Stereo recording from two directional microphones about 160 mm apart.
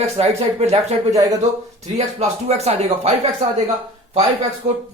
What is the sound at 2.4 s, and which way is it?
Speech, 40° right (ahead or behind).